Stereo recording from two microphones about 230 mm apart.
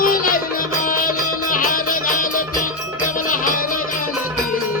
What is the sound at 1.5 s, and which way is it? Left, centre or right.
Music, left.